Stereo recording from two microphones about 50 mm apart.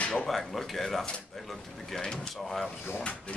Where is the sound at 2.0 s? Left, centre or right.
Centre.